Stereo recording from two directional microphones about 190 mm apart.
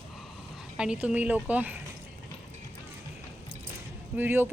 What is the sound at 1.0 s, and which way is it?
Speech, 10° right (ahead or behind).